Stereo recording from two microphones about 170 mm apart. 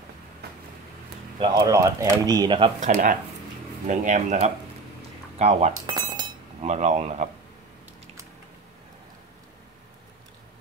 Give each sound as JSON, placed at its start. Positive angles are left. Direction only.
{"t": 1.4, "sound": "speech", "side_deg": -25}
{"t": 2.8, "sound": "speech", "side_deg": -50}
{"t": 5.9, "sound": "glass", "side_deg": -25}
{"t": 6.6, "sound": "speech", "side_deg": -45}